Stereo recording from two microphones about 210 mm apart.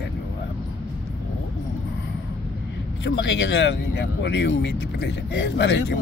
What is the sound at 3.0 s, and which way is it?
Speech, 60° left (ahead or behind).